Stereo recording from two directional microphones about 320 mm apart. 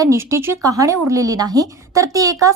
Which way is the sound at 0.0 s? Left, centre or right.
Centre.